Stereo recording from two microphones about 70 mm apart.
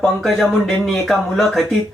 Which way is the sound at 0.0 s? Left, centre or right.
Centre.